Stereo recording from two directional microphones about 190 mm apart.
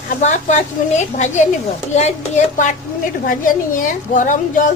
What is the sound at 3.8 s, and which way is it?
Speech, 45° left (ahead or behind).